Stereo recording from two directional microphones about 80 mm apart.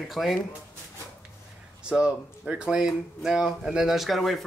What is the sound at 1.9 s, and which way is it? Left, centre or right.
Speech, centre.